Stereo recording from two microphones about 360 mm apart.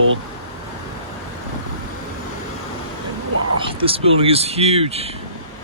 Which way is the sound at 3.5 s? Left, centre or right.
Centre.